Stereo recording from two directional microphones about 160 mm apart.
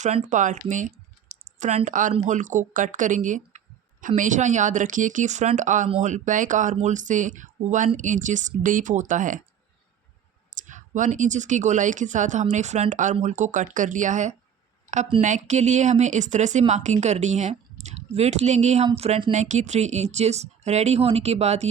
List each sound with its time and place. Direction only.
0.3 s speech: 55° right (ahead or behind)
10.5 s speech: 50° right (ahead or behind)